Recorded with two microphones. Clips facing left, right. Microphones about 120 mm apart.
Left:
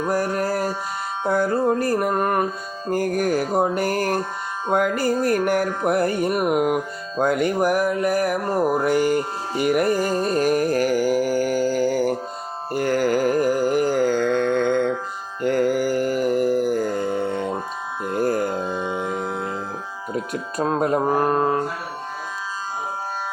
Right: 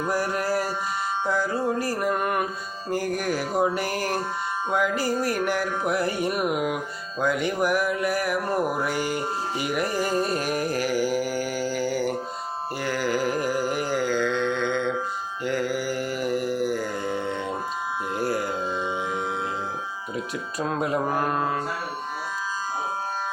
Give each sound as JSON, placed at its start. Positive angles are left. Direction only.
{"t": 0.1, "sound": "music", "side_deg": 45}
{"t": 1.2, "sound": "mantra", "side_deg": 55}
{"t": 10.2, "sound": "music", "side_deg": 45}
{"t": 12.7, "sound": "carnatic music", "side_deg": 45}
{"t": 15.4, "sound": "music", "side_deg": 50}
{"t": 18.1, "sound": "music", "side_deg": 45}
{"t": 20.1, "sound": "a sound", "side_deg": 45}
{"t": 21.0, "sound": "mantra", "side_deg": 30}